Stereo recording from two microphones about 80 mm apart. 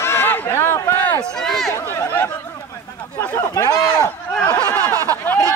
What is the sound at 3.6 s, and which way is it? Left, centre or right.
Speech, left.